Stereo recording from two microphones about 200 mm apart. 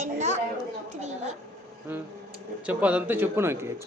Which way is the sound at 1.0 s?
35° right (ahead or behind).